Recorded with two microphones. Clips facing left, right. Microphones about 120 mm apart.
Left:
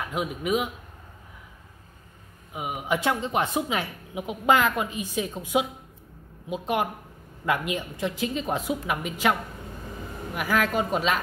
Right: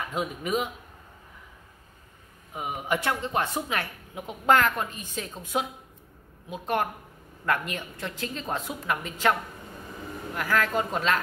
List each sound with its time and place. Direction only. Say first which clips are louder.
0.0 s a woman's voice: left 2 dB; 10° left (ahead or behind)
2.5 s a woman's voice: left 1 dB; 5° left (ahead or behind)
3.0 s a woman's voice: left 2 dB; 15° left (ahead or behind)
10.3 s a woman's voice: left 1 dB; 15° left (ahead or behind)